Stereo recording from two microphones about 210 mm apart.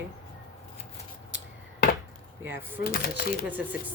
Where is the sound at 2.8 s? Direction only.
45° left (ahead or behind).